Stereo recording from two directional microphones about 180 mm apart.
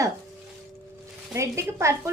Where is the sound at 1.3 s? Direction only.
15° right (ahead or behind).